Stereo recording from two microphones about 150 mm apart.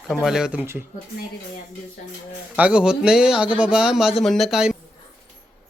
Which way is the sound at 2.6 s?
10° right (ahead or behind).